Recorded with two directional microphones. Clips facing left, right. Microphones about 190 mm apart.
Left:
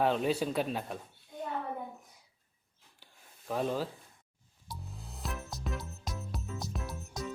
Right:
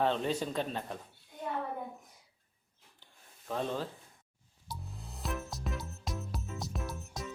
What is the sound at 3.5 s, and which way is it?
Speech, 10° left (ahead or behind).